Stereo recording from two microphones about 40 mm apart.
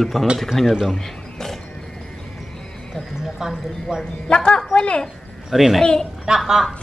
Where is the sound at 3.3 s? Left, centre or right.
Centre.